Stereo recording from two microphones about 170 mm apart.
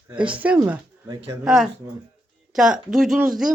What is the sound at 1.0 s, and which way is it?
Speech, 25° right (ahead or behind).